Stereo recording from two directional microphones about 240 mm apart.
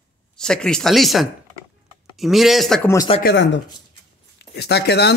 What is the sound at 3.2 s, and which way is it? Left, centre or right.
Speech, left.